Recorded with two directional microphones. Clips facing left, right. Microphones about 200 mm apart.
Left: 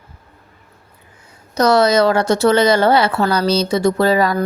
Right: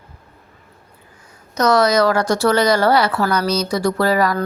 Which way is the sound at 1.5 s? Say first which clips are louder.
Left 2 dB; 30° left (ahead or behind).